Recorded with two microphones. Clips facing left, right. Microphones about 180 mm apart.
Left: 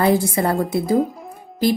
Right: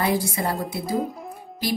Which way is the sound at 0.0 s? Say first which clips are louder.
Left 6 dB; 50° left (ahead or behind).